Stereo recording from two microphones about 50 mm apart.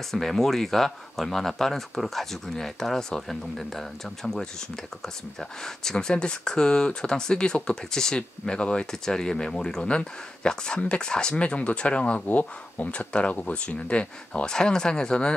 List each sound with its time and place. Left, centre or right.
0.1 s speech: centre